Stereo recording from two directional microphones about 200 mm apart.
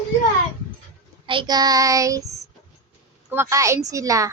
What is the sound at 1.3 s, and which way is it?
A woman's voice, 20° right (ahead or behind).